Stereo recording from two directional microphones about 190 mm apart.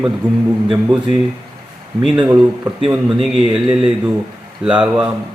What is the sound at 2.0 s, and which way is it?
Speech, 10° right (ahead or behind).